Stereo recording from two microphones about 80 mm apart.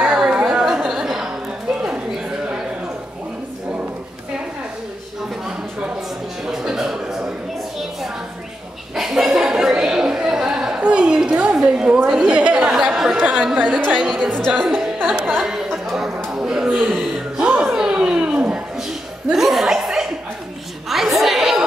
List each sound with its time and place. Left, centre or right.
0.0 s a sound: centre
0.5 s chatter: centre
6.4 s music: centre
8.9 s a sound: centre
12.1 s chatter: centre
13.2 s chatter: centre
14.5 s music: centre
15.4 s chatter: centre
16.3 s a sound: centre